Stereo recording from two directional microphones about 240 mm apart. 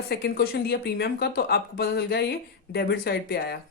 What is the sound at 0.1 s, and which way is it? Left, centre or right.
Speech, left.